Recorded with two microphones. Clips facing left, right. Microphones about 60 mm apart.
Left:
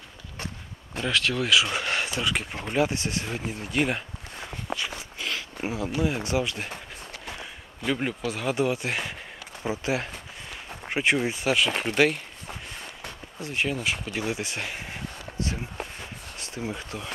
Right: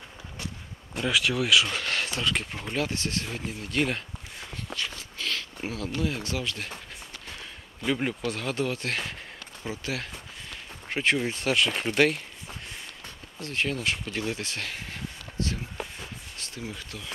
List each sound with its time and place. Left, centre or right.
0.9 s speech: centre
1.7 s speech: centre
4.7 s a sound: centre
7.8 s speech: centre; by 17.1 s left